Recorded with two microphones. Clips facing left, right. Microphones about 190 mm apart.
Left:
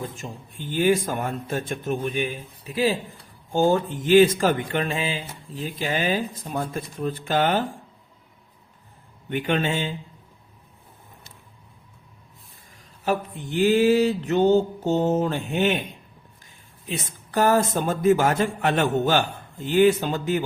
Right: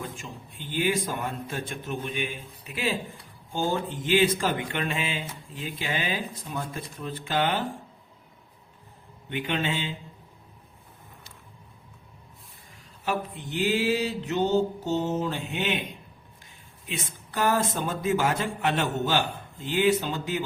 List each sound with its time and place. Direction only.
0.0 s speech: 45° left (ahead or behind)
3.5 s speech: 45° left (ahead or behind)
9.3 s speech: 50° left (ahead or behind)
13.1 s speech: 50° left (ahead or behind)
16.9 s speech: 40° left (ahead or behind)